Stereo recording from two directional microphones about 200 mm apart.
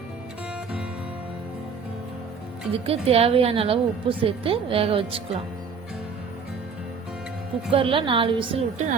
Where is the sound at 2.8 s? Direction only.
30° right (ahead or behind).